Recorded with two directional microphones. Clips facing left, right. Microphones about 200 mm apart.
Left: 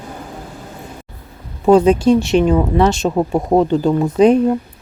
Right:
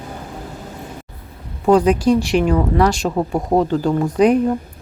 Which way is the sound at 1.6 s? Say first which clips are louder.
Left 3 dB; 25° left (ahead or behind).